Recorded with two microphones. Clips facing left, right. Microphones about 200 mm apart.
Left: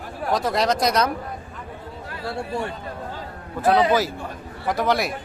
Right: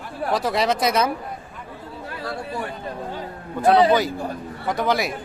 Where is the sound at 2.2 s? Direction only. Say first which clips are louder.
Left 3 dB; 25° left (ahead or behind).